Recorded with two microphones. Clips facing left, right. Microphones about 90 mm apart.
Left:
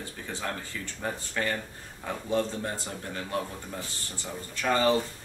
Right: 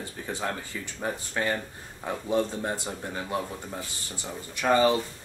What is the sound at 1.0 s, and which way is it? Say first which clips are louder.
Speech: right 2 dB; 15° right (ahead or behind).